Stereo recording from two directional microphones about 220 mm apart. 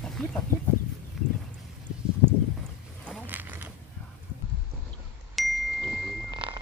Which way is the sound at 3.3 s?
10° right (ahead or behind).